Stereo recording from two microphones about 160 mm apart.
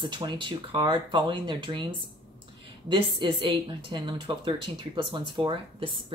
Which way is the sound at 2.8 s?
30° right (ahead or behind).